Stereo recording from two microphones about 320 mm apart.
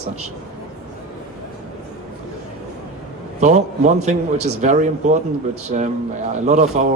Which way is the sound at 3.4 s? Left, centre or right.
Right.